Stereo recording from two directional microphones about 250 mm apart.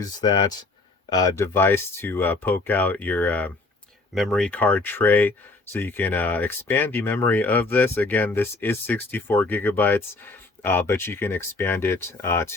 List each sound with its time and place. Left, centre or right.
0.0 s speech: centre